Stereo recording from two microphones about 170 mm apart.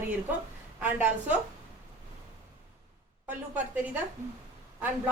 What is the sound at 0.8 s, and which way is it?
Speech, 10° right (ahead or behind).